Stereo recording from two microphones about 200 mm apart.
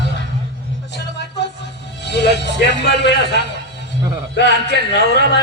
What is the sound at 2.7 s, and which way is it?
Speech, 60° left (ahead or behind).